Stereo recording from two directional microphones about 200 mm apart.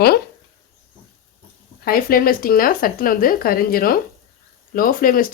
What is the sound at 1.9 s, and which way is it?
Speech, 45° left (ahead or behind).